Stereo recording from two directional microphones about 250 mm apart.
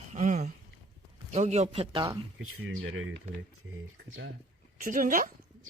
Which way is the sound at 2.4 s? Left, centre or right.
Right.